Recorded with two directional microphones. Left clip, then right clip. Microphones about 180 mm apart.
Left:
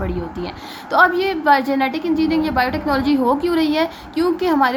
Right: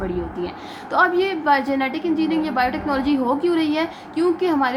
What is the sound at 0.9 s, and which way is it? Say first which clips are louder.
A woman's voice: left 3 dB; 25° left (ahead or behind).